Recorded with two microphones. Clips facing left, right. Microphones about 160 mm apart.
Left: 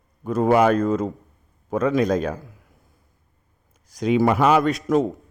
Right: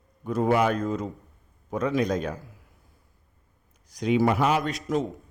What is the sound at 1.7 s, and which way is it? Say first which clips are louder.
Speech: left 6 dB; 90° left.